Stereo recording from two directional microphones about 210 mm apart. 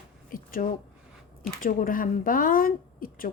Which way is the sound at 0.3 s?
40° left (ahead or behind).